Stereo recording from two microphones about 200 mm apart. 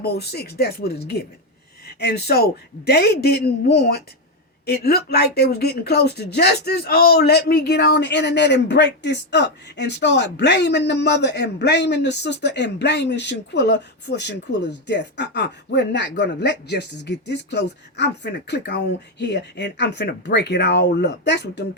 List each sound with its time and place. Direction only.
0.0 s a man's voice: 55° left (ahead or behind)